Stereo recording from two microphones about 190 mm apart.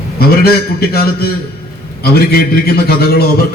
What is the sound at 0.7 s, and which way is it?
A man's voice, 55° left (ahead or behind).